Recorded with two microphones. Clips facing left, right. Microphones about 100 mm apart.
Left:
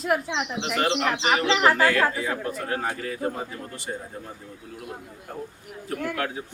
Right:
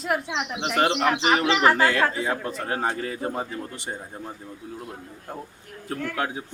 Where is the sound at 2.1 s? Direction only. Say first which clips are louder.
Right 1 dB; 25° right (ahead or behind).